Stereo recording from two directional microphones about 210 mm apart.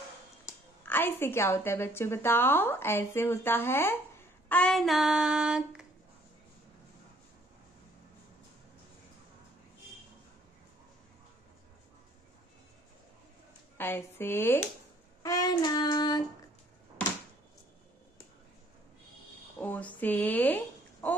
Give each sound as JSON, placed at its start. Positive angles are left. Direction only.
{"t": 0.8, "sound": "a woman's voice", "side_deg": 10}
{"t": 4.5, "sound": "child singing", "side_deg": 5}
{"t": 13.7, "sound": "a woman's voice", "side_deg": 10}
{"t": 15.2, "sound": "child singing", "side_deg": 15}
{"t": 19.6, "sound": "a woman's voice", "side_deg": 5}